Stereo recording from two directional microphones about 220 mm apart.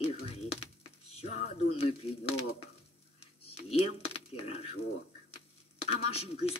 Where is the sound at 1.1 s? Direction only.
25° left (ahead or behind).